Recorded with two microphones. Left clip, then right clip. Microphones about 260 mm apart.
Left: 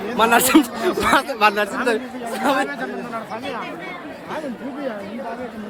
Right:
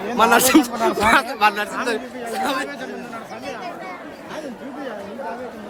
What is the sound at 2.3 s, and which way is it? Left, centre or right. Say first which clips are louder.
Chatter: left 3 dB; centre.